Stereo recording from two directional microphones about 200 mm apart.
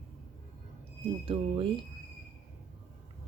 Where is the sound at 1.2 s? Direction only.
25° right (ahead or behind).